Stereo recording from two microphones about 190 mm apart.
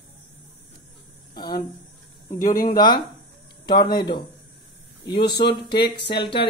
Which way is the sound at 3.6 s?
25° left (ahead or behind).